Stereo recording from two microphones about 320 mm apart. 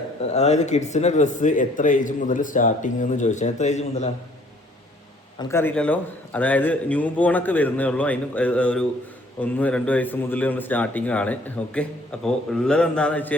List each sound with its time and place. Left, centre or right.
0.3 s a man's voice: left
5.4 s a man's voice: centre